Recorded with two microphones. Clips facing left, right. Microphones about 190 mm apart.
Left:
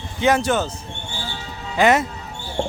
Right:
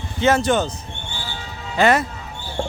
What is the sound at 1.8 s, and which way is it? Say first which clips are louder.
Speech: even; 15° left (ahead or behind).